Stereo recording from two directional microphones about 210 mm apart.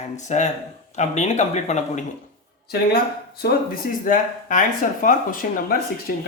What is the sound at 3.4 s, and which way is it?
Speech, 40° left (ahead or behind).